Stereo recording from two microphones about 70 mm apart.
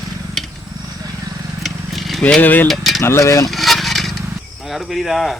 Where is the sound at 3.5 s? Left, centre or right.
Centre.